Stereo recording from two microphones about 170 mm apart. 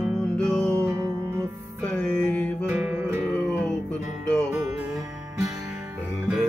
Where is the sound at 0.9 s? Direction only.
20° right (ahead or behind).